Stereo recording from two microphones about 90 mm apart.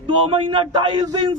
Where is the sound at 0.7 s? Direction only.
50° right (ahead or behind).